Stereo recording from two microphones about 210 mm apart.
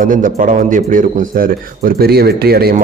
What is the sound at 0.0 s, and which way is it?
A man's voice, 40° right (ahead or behind).